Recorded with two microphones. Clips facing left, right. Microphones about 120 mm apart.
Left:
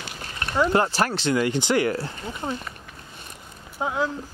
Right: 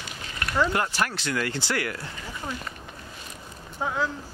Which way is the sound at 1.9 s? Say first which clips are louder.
Left 7 dB; 30° left (ahead or behind).